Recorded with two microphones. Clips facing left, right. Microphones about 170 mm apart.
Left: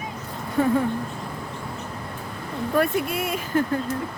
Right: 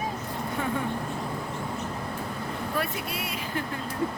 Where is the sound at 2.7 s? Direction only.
50° left (ahead or behind).